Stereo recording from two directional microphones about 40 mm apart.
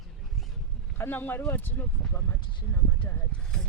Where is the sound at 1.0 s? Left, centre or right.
Left.